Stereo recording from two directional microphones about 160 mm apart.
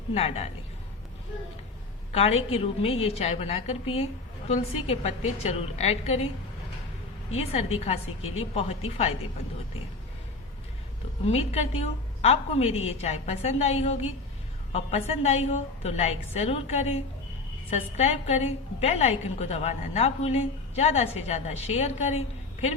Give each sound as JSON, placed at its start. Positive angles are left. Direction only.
{"t": 0.1, "sound": "a woman's voice", "side_deg": 40}
{"t": 2.1, "sound": "a woman's voice", "side_deg": 40}
{"t": 7.3, "sound": "a woman's voice", "side_deg": 40}
{"t": 11.3, "sound": "a woman's voice", "side_deg": 40}